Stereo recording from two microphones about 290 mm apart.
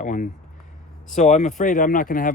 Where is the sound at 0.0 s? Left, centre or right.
Left.